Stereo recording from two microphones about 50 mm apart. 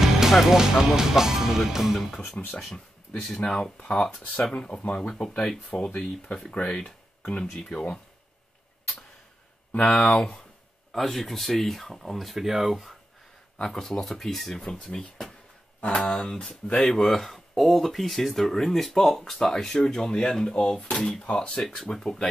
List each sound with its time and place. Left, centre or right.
0.0 s speech: centre
2.0 s speech: centre
3.2 s speech: centre
9.8 s speech: centre
10.9 s speech: centre
13.6 s speech: centre
15.8 s speech: left
16.1 s speech: centre